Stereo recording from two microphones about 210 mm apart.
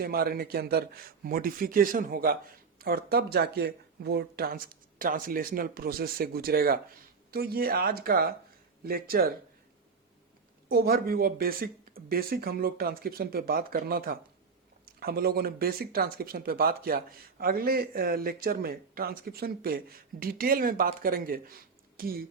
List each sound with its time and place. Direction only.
0.0 s speech: 45° right (ahead or behind)
10.7 s speech: 45° right (ahead or behind)